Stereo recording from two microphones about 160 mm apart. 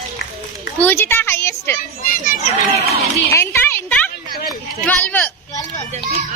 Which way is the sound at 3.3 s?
15° left (ahead or behind).